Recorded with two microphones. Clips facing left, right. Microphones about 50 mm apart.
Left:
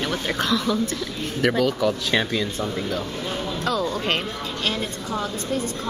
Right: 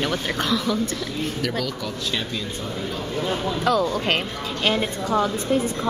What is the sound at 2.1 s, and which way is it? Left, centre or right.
Speech, left.